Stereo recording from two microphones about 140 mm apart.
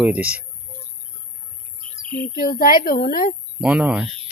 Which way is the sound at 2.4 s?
90° left.